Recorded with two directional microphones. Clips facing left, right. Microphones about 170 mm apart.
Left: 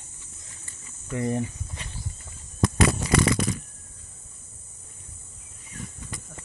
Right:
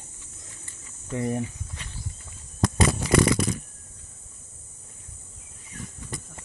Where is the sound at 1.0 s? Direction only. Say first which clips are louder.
Left 1 dB; 15° right (ahead or behind).